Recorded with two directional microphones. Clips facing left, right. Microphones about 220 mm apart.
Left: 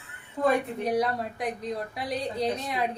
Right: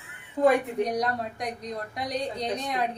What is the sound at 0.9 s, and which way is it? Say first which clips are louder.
A woman's voice: left 2 dB; 5° left (ahead or behind).